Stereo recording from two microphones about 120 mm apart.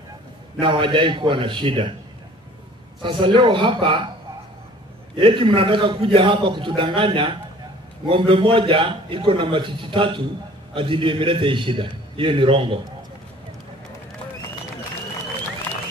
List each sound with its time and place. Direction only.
0.6 s a man's voice: 45° right (ahead or behind)
3.0 s a man's voice: 45° right (ahead or behind)
5.1 s a man's voice: 40° right (ahead or behind)